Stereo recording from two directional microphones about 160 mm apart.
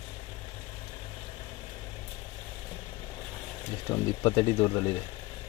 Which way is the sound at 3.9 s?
20° left (ahead or behind).